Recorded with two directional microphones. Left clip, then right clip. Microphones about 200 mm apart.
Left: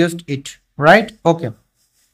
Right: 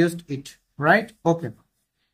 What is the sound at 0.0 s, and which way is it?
A man's voice, 30° left (ahead or behind).